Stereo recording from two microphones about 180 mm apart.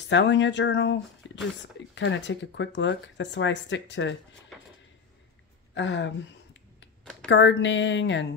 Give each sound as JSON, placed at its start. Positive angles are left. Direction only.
{"t": 0.1, "sound": "speech", "side_deg": 80}
{"t": 5.8, "sound": "a sound", "side_deg": 80}
{"t": 7.2, "sound": "speech", "side_deg": 85}